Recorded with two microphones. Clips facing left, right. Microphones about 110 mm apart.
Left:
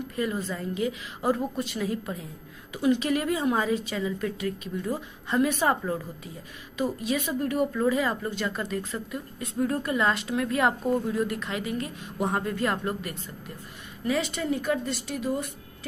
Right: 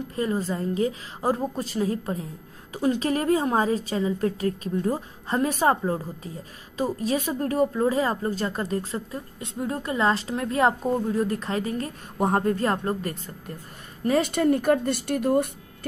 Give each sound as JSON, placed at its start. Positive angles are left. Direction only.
{"t": 0.1, "sound": "a woman's voice", "side_deg": -35}